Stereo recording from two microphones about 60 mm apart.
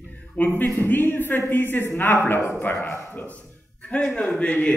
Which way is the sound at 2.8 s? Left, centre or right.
Left.